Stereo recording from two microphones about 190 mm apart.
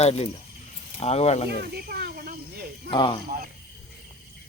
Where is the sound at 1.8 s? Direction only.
55° right (ahead or behind).